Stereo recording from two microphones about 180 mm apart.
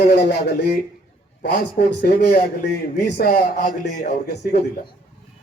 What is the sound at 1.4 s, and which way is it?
Speech, 50° left (ahead or behind).